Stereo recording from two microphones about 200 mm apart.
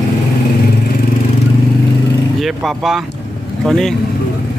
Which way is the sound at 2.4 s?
Centre (ahead or behind).